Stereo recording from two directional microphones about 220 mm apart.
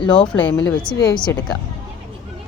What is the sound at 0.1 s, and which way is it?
A woman's voice, 5° left (ahead or behind).